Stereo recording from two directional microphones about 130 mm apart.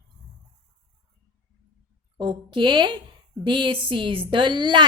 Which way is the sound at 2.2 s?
40° right (ahead or behind).